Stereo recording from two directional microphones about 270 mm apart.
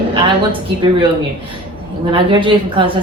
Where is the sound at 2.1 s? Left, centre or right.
Centre.